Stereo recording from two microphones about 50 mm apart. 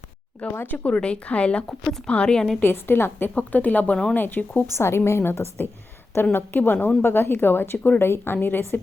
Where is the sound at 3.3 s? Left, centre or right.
Left.